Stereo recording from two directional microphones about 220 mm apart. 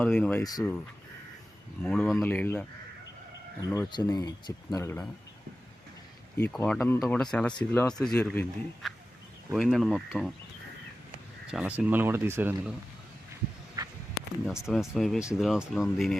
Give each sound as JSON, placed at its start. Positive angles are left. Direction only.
{"t": 0.0, "sound": "speech", "side_deg": 5}
{"t": 1.8, "sound": "speech", "side_deg": 5}
{"t": 6.3, "sound": "speech", "side_deg": 10}
{"t": 11.5, "sound": "speech", "side_deg": -5}
{"t": 13.8, "sound": "a sound", "side_deg": -15}
{"t": 14.4, "sound": "speech", "side_deg": 0}